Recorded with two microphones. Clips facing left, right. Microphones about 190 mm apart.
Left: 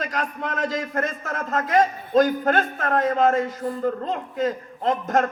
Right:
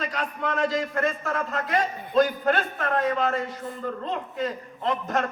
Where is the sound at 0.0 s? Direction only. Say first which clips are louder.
Left 1 dB; 45° left (ahead or behind).